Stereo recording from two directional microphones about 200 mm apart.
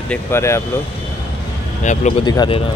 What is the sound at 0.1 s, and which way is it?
Speech, 10° left (ahead or behind).